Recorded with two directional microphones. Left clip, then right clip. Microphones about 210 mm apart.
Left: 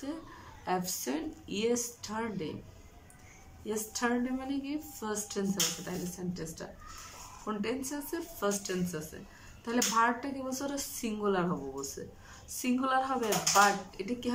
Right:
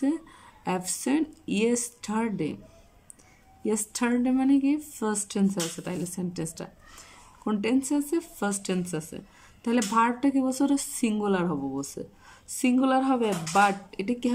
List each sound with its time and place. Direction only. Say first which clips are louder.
0.7 s a woman's voice: right 5 dB; 45° right (ahead or behind)
3.6 s a woman's voice: right 5 dB; 50° right (ahead or behind)